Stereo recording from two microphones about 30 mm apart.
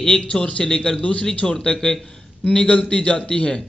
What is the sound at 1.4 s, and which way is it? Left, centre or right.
A man's voice, left.